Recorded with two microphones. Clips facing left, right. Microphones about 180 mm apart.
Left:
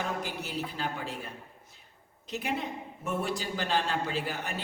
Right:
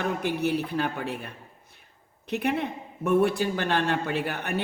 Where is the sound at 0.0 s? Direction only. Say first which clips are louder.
Right 8 dB; 65° right (ahead or behind).